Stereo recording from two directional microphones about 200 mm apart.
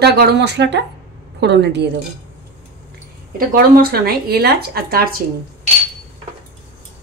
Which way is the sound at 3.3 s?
45° right (ahead or behind).